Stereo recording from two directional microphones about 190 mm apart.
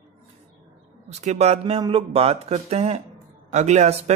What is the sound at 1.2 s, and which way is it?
Speech, 35° right (ahead or behind).